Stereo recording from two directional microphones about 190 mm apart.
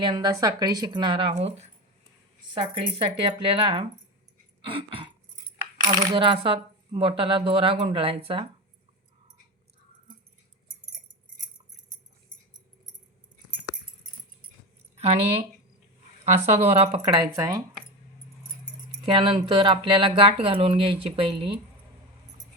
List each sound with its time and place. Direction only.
0.0 s speech: 25° right (ahead or behind)
3.4 s speech: 30° right (ahead or behind)
14.9 s speech: 30° right (ahead or behind)
19.0 s speech: 25° right (ahead or behind)